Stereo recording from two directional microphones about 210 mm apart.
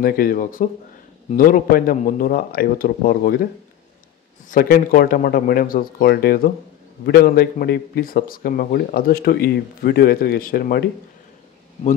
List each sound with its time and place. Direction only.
0.0 s speech: 45° left (ahead or behind)
4.5 s speech: 45° left (ahead or behind)